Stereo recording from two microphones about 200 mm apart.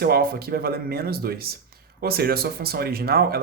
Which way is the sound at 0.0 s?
50° right (ahead or behind).